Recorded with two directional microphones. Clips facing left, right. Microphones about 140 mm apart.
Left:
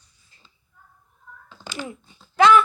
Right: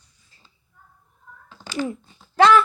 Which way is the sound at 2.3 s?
35° right (ahead or behind).